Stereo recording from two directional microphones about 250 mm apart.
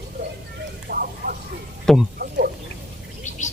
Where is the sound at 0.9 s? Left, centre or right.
Right.